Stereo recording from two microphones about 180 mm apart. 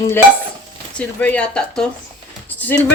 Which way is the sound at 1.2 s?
5° left (ahead or behind).